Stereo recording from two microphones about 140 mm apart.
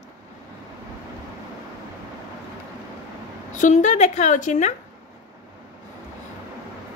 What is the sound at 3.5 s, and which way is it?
A woman's voice, 60° left (ahead or behind).